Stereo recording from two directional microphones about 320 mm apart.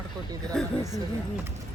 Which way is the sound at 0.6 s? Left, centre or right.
Centre.